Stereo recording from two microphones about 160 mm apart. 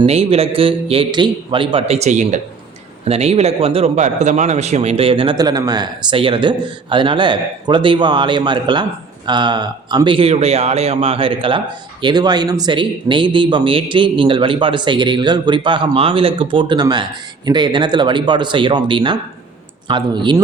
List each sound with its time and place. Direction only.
0.0 s a man's voice: 40° right (ahead or behind)